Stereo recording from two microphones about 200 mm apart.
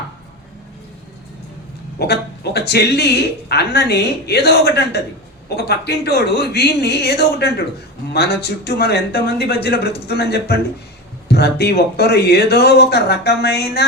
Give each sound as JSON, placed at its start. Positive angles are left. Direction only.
{"t": 2.0, "sound": "speech", "side_deg": 55}